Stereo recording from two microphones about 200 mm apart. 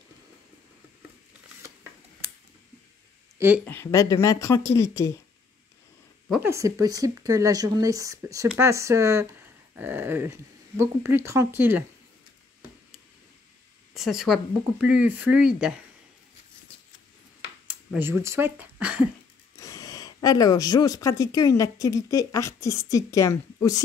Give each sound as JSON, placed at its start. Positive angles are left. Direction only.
{"t": 3.3, "sound": "speech", "side_deg": -10}
{"t": 3.6, "sound": "speech", "side_deg": 15}
{"t": 6.4, "sound": "speech", "side_deg": -15}
{"t": 13.9, "sound": "speech", "side_deg": 0}
{"t": 17.6, "sound": "speech", "side_deg": -10}
{"t": 19.5, "sound": "speech", "side_deg": 15}